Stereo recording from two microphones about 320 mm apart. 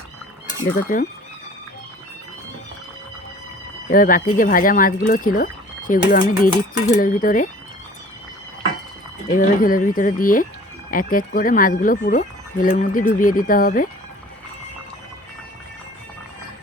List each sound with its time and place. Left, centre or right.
0.9 s speech: left
3.8 s speech: left
9.3 s speech: left